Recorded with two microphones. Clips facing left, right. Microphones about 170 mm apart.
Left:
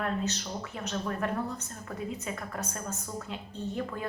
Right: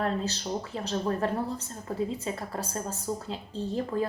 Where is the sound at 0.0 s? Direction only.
30° right (ahead or behind).